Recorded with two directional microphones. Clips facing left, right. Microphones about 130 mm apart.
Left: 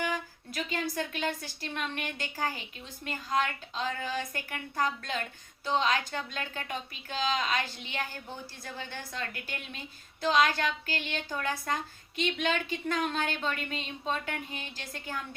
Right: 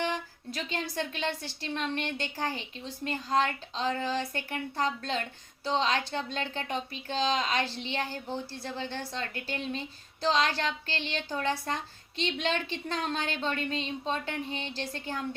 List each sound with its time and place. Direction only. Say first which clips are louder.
0.0 s a woman's voice: right 1 dB; 30° right (ahead or behind)